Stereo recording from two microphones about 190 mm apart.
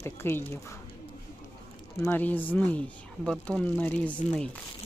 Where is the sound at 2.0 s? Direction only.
10° left (ahead or behind).